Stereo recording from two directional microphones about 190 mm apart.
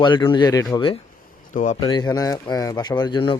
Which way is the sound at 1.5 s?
40° left (ahead or behind).